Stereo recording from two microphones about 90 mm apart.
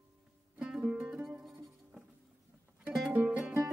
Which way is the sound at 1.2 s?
Centre (ahead or behind).